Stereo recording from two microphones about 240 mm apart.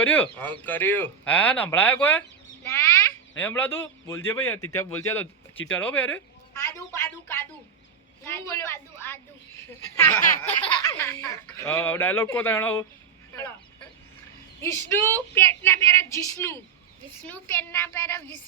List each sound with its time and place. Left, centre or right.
0.1 s a man's voice: centre
3.4 s a man's voice: centre
14.6 s a man's voice: centre